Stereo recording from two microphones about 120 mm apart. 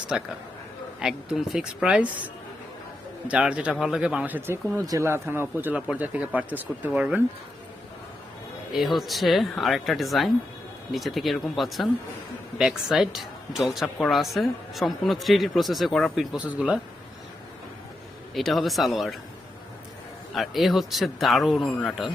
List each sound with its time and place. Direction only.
0.1 s speech: 5° right (ahead or behind)
3.2 s speech: 10° right (ahead or behind)
4.4 s speech: 20° right (ahead or behind)
8.7 s speech: centre (ahead or behind)
18.3 s speech: centre (ahead or behind)
20.3 s speech: centre (ahead or behind)